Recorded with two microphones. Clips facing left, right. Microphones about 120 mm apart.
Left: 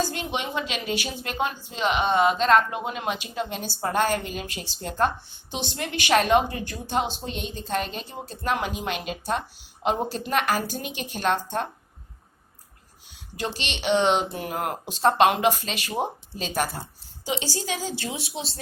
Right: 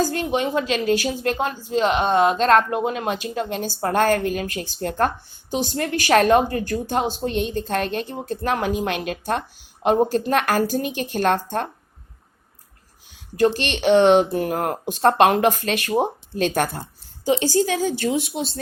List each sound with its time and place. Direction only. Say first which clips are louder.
0.0 s a woman's voice: right 7 dB; 45° right (ahead or behind)
13.3 s a woman's voice: right 12 dB; 45° right (ahead or behind)